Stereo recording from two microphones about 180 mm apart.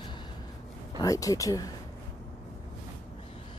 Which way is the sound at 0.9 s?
20° left (ahead or behind).